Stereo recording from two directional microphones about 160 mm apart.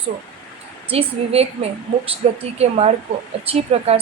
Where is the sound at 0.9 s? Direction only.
40° right (ahead or behind).